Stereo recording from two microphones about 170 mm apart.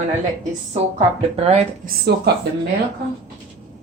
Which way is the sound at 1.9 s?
75° right (ahead or behind).